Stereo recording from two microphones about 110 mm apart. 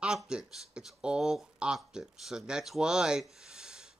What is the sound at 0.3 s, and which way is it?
Speech, 5° right (ahead or behind).